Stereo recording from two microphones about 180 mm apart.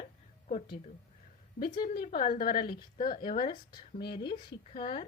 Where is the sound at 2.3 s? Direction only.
30° left (ahead or behind).